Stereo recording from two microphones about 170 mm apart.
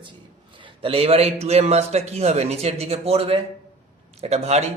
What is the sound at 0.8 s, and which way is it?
A man's voice, 35° right (ahead or behind).